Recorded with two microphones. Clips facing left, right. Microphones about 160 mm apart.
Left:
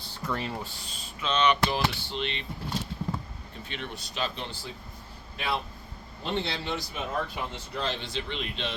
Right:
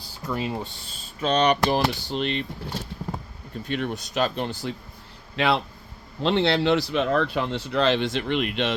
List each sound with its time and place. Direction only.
0.3 s speech: 15° right (ahead or behind)
1.2 s speech: 40° right (ahead or behind)
3.7 s speech: 45° right (ahead or behind)
5.4 s speech: 85° right
8.1 s speech: 60° right (ahead or behind)